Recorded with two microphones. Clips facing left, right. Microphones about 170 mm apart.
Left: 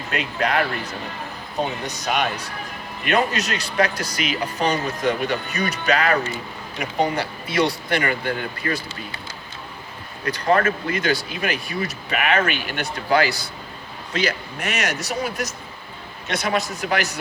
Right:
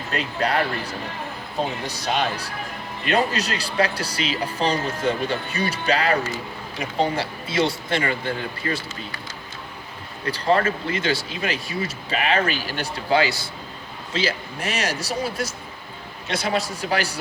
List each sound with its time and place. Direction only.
0.1 s a man's voice: 35° right (ahead or behind)
10.2 s a man's voice: 30° right (ahead or behind)